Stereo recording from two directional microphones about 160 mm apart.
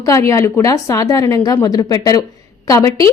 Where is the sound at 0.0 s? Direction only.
20° left (ahead or behind).